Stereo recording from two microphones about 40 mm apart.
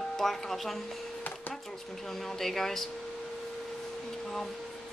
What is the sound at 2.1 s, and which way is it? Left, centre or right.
Speech, centre.